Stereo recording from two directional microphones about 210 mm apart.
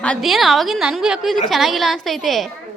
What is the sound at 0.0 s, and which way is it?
A woman's voice, centre (ahead or behind).